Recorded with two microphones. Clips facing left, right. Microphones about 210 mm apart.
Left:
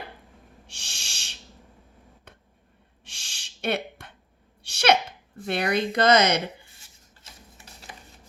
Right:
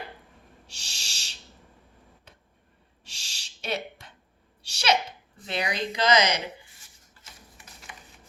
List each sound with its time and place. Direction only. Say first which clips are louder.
0.7 s owl: left 2 dB; 55° left (ahead or behind)
3.0 s owl: even; 55° left (ahead or behind)
4.6 s sneeze: left 4 dB; 55° left (ahead or behind)
5.5 s a woman's voice: left 5 dB; 60° left (ahead or behind)
7.6 s typewriter: left 3 dB; 35° left (ahead or behind)